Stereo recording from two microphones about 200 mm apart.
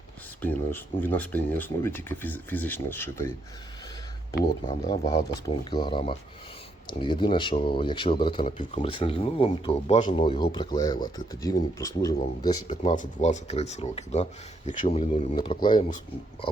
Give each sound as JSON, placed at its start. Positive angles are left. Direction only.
{"t": 0.4, "sound": "speech", "side_deg": 10}
{"t": 4.7, "sound": "speech", "side_deg": 30}
{"t": 12.7, "sound": "speech", "side_deg": 40}